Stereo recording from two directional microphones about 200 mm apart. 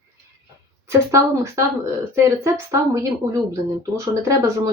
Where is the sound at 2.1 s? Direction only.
15° right (ahead or behind).